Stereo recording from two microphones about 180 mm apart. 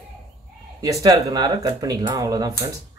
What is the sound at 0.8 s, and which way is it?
Speech, 20° right (ahead or behind).